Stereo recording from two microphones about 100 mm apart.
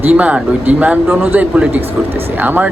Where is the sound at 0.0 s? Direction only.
15° right (ahead or behind).